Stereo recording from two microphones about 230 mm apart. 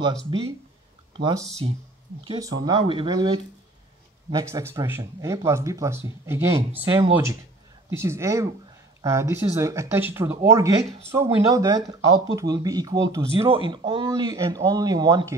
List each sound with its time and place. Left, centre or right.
0.3 s speech: centre